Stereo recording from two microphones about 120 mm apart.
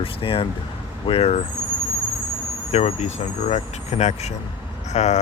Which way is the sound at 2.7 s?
60° left (ahead or behind).